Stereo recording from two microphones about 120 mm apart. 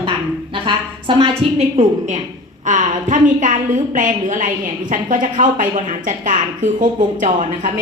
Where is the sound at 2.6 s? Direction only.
90° right.